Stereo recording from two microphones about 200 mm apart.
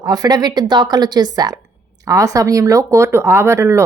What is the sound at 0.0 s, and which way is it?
Speech, 20° right (ahead or behind).